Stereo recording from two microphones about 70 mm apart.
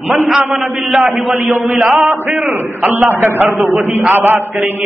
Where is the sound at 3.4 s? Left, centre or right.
Centre.